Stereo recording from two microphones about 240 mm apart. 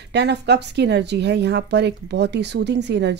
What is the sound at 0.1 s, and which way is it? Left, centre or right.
A woman's voice, right.